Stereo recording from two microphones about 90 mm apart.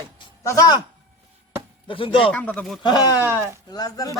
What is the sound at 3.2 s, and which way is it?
Speech, 25° right (ahead or behind).